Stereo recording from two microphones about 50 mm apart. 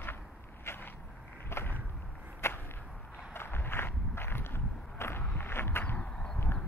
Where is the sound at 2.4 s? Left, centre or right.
Left.